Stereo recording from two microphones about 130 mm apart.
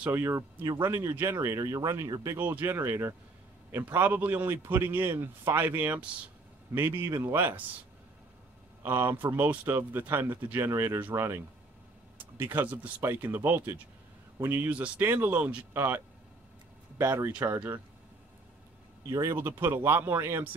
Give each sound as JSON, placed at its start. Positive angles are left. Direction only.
{"t": 0.0, "sound": "speech", "side_deg": -20}
{"t": 2.3, "sound": "a man's voice", "side_deg": -15}
{"t": 8.8, "sound": "a man's voice", "side_deg": -15}
{"t": 17.0, "sound": "speech", "side_deg": -20}
{"t": 19.0, "sound": "speech", "side_deg": -25}